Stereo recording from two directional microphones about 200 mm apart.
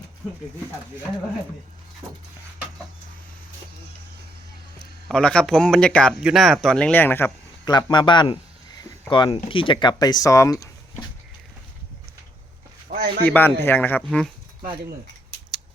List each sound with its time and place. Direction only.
5.0 s speech: 5° left (ahead or behind)
7.7 s speech: 20° left (ahead or behind)
8.8 s a sound: 20° left (ahead or behind)
9.5 s speech: 25° left (ahead or behind)
12.9 s a sound: 50° right (ahead or behind)
13.2 s speech: 10° left (ahead or behind)